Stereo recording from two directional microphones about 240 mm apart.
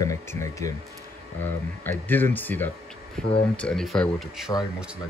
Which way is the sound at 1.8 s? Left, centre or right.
Centre.